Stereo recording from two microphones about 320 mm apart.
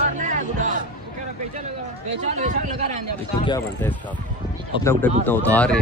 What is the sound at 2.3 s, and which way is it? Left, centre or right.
Speech, right.